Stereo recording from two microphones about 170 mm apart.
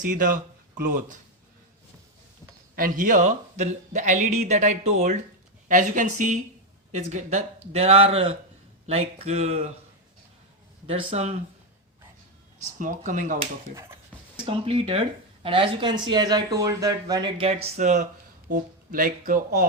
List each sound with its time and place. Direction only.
0.0 s speech: 55° right (ahead or behind)
2.7 s speech: 55° right (ahead or behind); by 9.6 s 40° right (ahead or behind)
10.8 s speech: 40° right (ahead or behind)
12.8 s speech: 50° right (ahead or behind)
14.4 s speech: 30° right (ahead or behind)
18.5 s speech: 55° right (ahead or behind)